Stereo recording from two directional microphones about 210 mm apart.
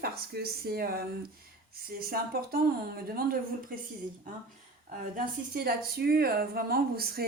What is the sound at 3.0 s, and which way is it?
Speech, 45° right (ahead or behind).